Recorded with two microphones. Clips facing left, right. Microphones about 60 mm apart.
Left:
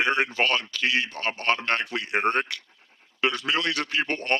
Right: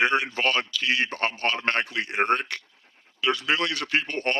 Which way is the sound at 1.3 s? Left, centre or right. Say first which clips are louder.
Left 1 dB; left.